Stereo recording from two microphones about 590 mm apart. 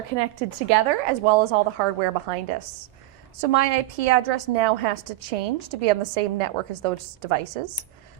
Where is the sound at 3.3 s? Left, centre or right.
Right.